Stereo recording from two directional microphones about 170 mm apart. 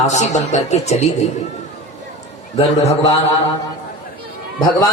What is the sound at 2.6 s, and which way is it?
Speech, 40° left (ahead or behind).